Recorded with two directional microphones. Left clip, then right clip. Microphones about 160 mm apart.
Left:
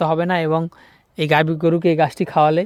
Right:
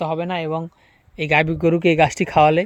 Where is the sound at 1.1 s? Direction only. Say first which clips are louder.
Left 1 dB; 30° left (ahead or behind).